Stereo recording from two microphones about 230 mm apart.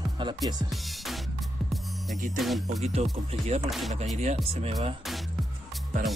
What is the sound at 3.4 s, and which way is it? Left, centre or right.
Music, right.